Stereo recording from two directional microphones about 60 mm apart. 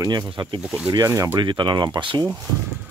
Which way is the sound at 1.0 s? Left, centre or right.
Right.